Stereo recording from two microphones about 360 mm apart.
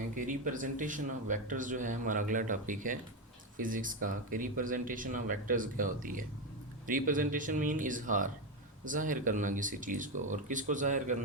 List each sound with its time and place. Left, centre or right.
0.2 s speech: right